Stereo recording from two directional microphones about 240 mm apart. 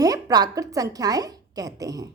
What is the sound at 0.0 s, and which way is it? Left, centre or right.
A woman's voice, centre.